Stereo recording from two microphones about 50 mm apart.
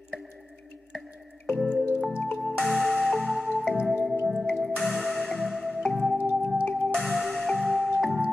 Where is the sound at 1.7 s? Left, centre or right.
Right.